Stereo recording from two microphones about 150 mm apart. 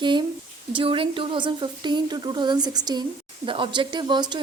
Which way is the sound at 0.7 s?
35° right (ahead or behind).